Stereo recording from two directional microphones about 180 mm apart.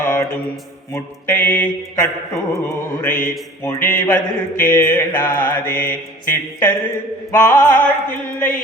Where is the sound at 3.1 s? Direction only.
50° left (ahead or behind).